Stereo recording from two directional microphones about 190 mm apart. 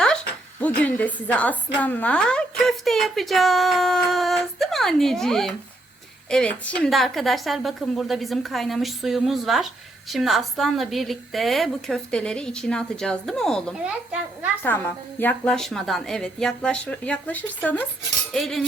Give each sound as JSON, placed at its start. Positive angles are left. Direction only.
{"t": 0.8, "sound": "a woman's voice", "side_deg": 5}
{"t": 13.8, "sound": "a child's voice", "side_deg": -5}
{"t": 14.6, "sound": "a woman's voice", "side_deg": 10}
{"t": 18.3, "sound": "cutlery", "side_deg": 0}